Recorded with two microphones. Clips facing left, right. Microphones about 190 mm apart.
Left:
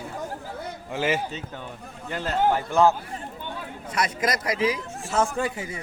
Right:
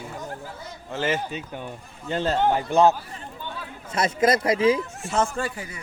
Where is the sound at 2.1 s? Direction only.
30° right (ahead or behind).